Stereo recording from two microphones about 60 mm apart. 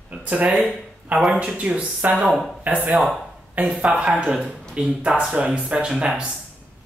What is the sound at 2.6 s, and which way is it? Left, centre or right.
Speech, right.